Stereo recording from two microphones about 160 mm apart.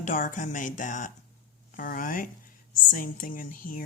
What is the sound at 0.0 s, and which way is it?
Speech, 55° left (ahead or behind).